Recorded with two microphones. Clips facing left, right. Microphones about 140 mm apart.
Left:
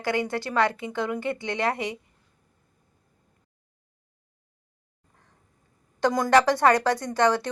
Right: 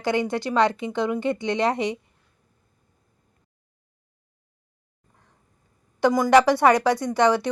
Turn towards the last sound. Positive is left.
turn(degrees=-15)  # may be behind; listen again after turning